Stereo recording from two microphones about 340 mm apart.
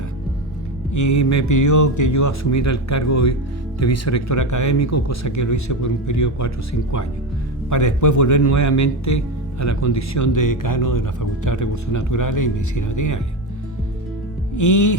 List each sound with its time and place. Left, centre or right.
0.9 s speech: left
7.7 s speech: left
14.5 s music: left